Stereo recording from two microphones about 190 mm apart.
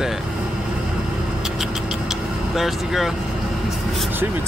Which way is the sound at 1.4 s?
Centre (ahead or behind).